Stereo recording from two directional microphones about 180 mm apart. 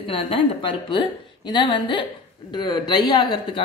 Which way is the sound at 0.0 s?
30° left (ahead or behind).